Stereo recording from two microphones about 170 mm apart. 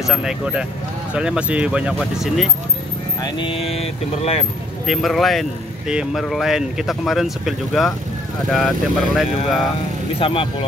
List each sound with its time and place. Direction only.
0.1 s speech: 5° right (ahead or behind)
3.2 s speech: 25° left (ahead or behind)
4.8 s speech: centre (ahead or behind)
10.1 s speech: 30° left (ahead or behind)